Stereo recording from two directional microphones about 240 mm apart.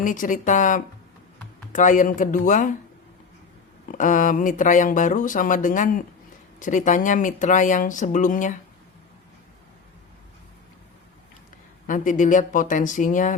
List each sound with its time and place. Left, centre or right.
0.0 s speech: left
3.9 s speech: left
11.9 s speech: left